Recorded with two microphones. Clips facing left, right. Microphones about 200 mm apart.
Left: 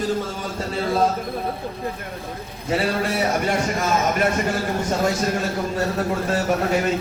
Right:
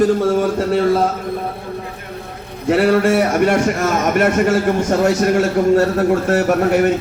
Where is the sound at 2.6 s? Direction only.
70° right (ahead or behind).